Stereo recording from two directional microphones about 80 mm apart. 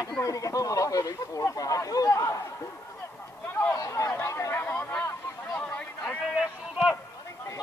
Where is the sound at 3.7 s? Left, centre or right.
Left.